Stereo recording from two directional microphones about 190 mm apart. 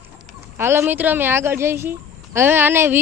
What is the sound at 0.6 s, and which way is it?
Speech, 10° right (ahead or behind).